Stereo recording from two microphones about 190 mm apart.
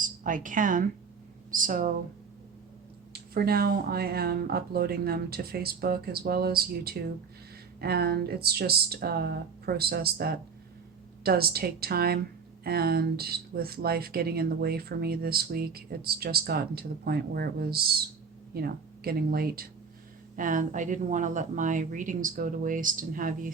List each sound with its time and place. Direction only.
0.0 s a woman's voice: 45° right (ahead or behind)
3.1 s speech: 55° right (ahead or behind)